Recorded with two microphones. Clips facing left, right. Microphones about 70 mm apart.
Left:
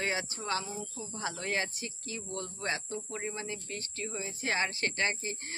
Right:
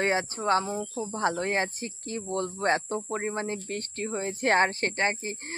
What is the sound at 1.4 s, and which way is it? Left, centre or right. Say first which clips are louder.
Speech: right 6 dB; right.